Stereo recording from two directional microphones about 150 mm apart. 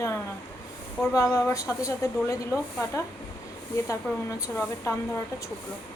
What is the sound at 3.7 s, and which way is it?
A woman's voice, 20° left (ahead or behind).